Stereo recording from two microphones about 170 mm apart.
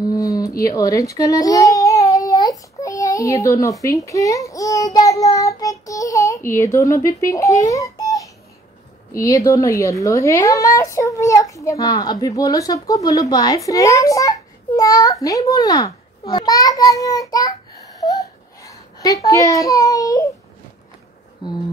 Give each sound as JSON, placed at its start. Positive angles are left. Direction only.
{"t": 0.0, "sound": "baby cry", "side_deg": 20}
{"t": 2.8, "sound": "a sound", "side_deg": 20}
{"t": 3.8, "sound": "child singing", "side_deg": 20}
{"t": 9.1, "sound": "a woman's voice", "side_deg": 20}
{"t": 18.0, "sound": "a sound", "side_deg": 20}
{"t": 19.2, "sound": "a woman's voice", "side_deg": 20}